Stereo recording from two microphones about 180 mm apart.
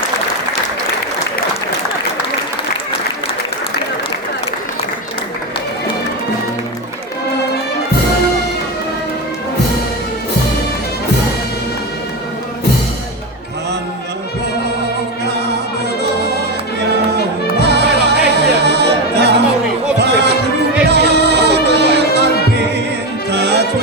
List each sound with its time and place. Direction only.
17.6 s music: 70° right (ahead or behind)